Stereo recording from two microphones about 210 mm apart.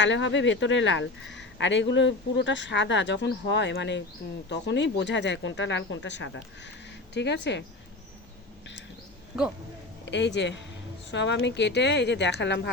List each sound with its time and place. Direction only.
0.0 s speech: 60° left (ahead or behind)
9.3 s a man's voice: centre (ahead or behind)
10.1 s speech: 55° left (ahead or behind)